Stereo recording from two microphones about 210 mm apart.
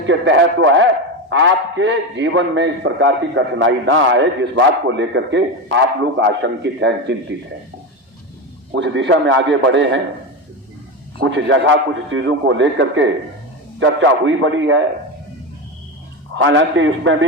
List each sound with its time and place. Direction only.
0.1 s a man's voice: 60° right (ahead or behind)
8.7 s a man's voice: 55° right (ahead or behind)
11.2 s a man's voice: 60° right (ahead or behind)
16.3 s a man's voice: 65° right (ahead or behind)